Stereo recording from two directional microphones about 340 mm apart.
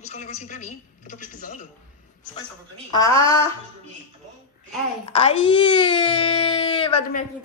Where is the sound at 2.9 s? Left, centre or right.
Centre.